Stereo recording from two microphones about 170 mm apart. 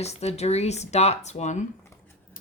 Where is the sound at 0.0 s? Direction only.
40° left (ahead or behind).